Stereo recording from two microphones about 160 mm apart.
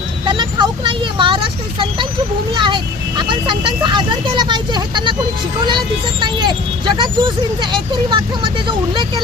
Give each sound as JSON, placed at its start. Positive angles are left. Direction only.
{"t": 0.3, "sound": "vehicle", "side_deg": -30}
{"t": 2.6, "sound": "speech", "side_deg": -30}